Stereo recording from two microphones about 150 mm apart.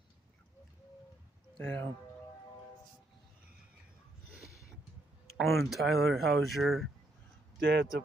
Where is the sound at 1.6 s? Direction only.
10° left (ahead or behind).